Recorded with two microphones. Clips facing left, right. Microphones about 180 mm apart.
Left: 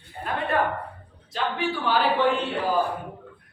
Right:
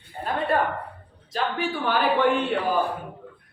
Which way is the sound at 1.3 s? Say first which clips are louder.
Even; 45° right (ahead or behind).